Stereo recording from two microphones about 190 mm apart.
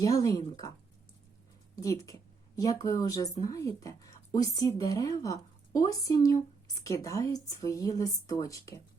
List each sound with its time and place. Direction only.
0.0 s speech: 15° left (ahead or behind)
1.7 s speech: 15° left (ahead or behind)